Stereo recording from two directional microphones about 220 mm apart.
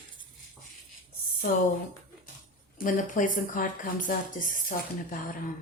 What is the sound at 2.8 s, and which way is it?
A woman's voice, 35° left (ahead or behind).